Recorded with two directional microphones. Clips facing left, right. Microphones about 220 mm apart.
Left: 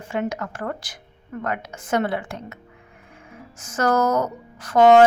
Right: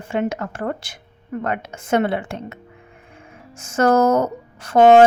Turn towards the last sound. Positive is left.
turn(degrees=-25)  # may be behind; listen again after turning